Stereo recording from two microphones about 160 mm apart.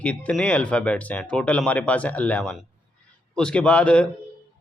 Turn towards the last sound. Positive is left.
turn(degrees=5)  # may be behind; listen again after turning